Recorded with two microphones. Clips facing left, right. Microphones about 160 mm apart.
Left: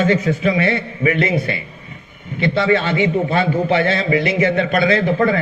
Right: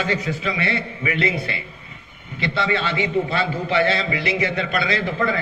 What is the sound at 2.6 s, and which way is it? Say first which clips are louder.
A man's voice: left 7 dB; 35° left (ahead or behind).